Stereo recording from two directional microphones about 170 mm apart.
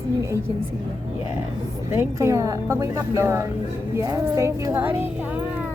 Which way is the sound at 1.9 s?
15° right (ahead or behind).